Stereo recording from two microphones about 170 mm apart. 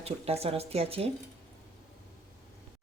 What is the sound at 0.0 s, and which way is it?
A woman's voice, 35° right (ahead or behind).